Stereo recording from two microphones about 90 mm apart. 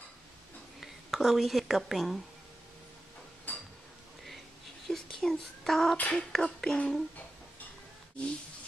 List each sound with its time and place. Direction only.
0.7 s speech: centre (ahead or behind)
3.5 s a sound: 20° left (ahead or behind)
4.9 s a child's voice: 10° left (ahead or behind)